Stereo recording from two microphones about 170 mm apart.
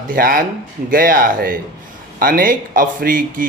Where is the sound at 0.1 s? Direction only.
55° right (ahead or behind).